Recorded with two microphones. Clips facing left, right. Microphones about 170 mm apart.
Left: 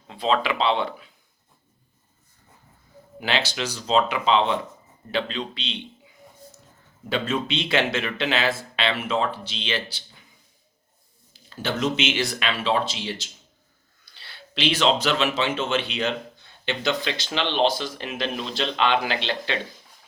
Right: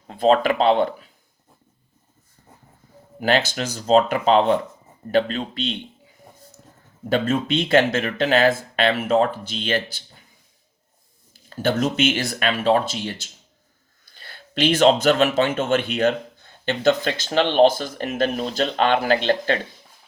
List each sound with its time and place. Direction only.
0.1 s speech: 45° right (ahead or behind)
3.2 s speech: 45° right (ahead or behind)
7.1 s speech: 50° right (ahead or behind)
11.4 s speech: 45° right (ahead or behind)